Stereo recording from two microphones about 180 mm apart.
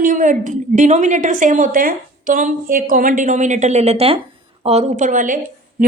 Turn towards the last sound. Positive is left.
turn(degrees=-50)  # may be behind; listen again after turning